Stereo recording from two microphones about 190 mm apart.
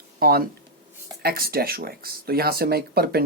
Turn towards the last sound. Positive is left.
turn(degrees=-55)  # may be behind; listen again after turning